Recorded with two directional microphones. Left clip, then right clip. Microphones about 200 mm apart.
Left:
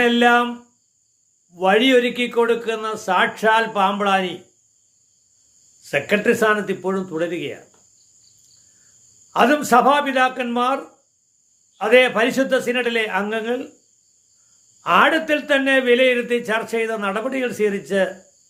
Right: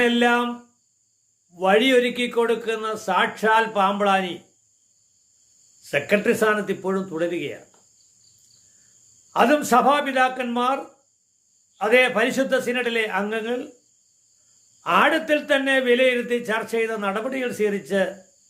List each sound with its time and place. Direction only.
0.0 s a man's voice: 15° left (ahead or behind)
1.5 s a man's voice: 15° left (ahead or behind)
5.8 s a man's voice: 15° left (ahead or behind)
9.3 s a man's voice: 15° left (ahead or behind)
11.8 s a man's voice: 15° left (ahead or behind)
14.8 s a man's voice: 15° left (ahead or behind)